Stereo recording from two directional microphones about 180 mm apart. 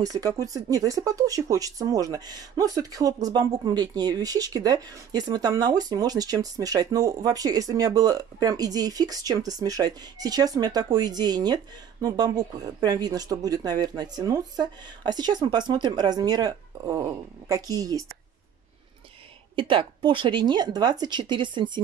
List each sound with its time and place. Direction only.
0.0 s speech: 20° right (ahead or behind)
19.5 s speech: 25° right (ahead or behind)